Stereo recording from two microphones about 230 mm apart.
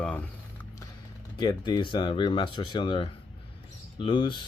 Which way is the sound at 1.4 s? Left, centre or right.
Centre.